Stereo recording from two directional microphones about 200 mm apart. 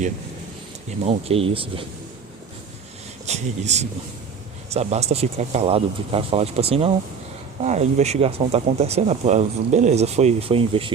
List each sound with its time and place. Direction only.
1.0 s speech: 30° right (ahead or behind)
3.2 s speech: 35° right (ahead or behind)